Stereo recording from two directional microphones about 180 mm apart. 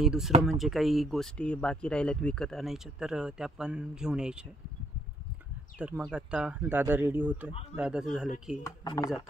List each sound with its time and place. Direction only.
0.0 s speech: centre (ahead or behind)
5.8 s speech: 5° right (ahead or behind)
8.6 s speech: 20° left (ahead or behind)